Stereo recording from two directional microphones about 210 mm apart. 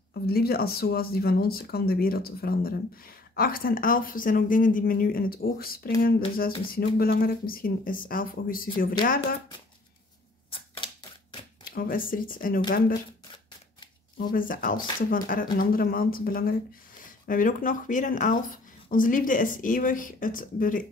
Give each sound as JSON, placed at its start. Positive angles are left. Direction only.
{"t": 0.1, "sound": "speech", "side_deg": 45}
{"t": 10.5, "sound": "a sound", "side_deg": 25}
{"t": 11.7, "sound": "speech", "side_deg": 45}
{"t": 14.1, "sound": "speech", "side_deg": 45}